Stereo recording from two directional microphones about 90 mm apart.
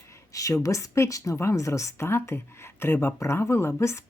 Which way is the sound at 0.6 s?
35° left (ahead or behind).